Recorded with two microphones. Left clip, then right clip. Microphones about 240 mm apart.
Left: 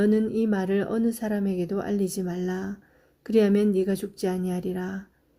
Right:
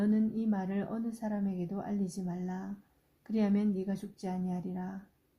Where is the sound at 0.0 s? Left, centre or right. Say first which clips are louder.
Left 10 dB; left.